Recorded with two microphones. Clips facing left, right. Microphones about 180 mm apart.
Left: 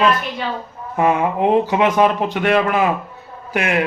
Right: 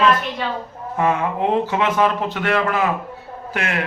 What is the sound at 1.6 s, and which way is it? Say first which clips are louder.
Speech: left 3 dB; 15° left (ahead or behind).